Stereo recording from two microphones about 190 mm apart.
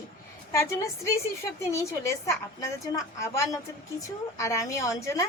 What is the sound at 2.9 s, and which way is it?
A woman's voice, 15° left (ahead or behind).